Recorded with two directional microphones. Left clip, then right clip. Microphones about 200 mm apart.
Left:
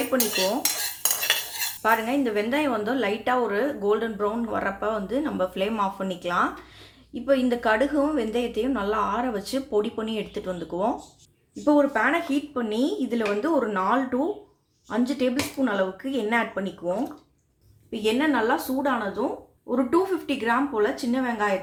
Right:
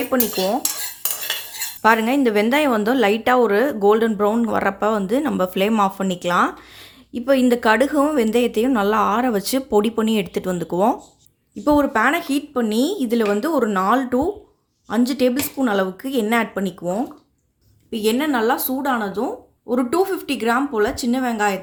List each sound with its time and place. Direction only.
0.1 s speech: 45° right (ahead or behind)
1.8 s a woman's voice: 55° right (ahead or behind)
17.9 s a woman's voice: 55° right (ahead or behind)